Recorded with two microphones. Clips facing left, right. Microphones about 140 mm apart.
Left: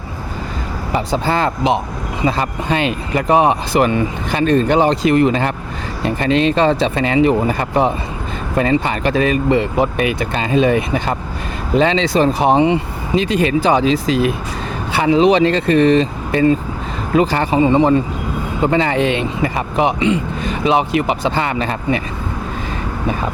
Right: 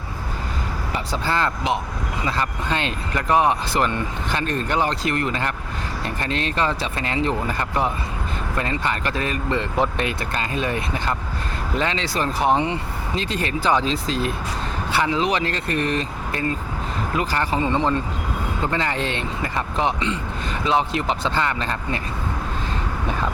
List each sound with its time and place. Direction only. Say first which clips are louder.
0.9 s speech: left 7 dB; 15° left (ahead or behind)
15.6 s speech: left 11 dB; 90° left
16.0 s speech: left 11 dB; 20° left (ahead or behind)